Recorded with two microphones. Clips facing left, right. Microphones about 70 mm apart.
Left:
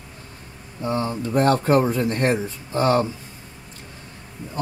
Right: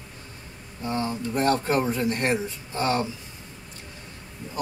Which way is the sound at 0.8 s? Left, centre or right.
Left.